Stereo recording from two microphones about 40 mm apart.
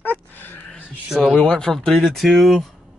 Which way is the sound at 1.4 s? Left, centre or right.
Centre.